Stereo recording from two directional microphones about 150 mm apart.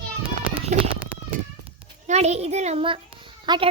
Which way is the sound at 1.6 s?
45° right (ahead or behind).